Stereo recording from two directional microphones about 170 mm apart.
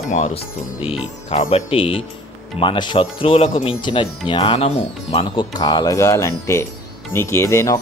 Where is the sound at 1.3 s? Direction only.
35° left (ahead or behind).